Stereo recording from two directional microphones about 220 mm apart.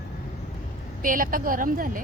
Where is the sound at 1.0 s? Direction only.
40° right (ahead or behind).